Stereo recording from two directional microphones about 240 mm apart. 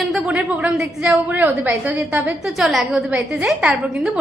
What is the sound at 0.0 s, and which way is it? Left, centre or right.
A woman's voice, centre.